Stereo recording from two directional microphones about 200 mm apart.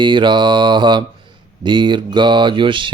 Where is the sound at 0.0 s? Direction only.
25° right (ahead or behind).